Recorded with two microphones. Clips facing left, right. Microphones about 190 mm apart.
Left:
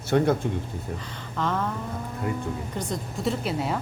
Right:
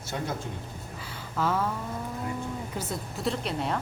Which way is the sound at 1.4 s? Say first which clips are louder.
Even; 5° right (ahead or behind).